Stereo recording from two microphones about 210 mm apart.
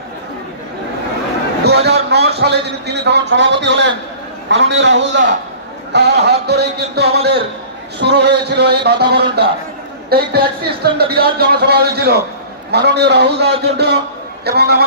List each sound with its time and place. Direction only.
1.6 s a man's voice: 50° right (ahead or behind)